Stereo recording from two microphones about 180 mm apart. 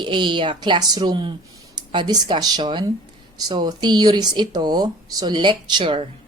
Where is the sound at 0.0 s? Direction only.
25° right (ahead or behind).